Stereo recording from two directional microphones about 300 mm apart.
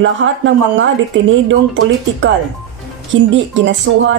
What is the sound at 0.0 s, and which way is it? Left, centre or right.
Speech, right.